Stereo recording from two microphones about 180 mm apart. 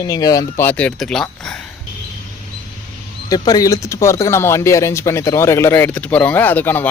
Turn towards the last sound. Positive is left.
turn(degrees=10)  # may be behind; listen again after turning